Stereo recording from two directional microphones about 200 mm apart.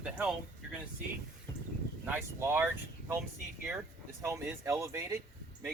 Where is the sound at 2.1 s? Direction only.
10° right (ahead or behind).